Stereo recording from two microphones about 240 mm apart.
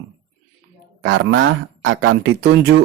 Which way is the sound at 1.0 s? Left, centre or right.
Right.